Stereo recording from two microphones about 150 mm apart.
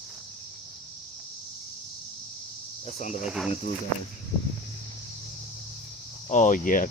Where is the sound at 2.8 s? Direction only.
50° left (ahead or behind).